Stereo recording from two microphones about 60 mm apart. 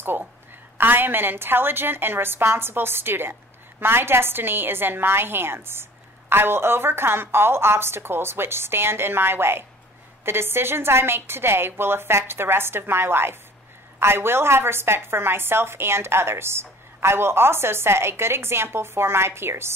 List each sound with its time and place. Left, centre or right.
0.0 s a woman's voice: right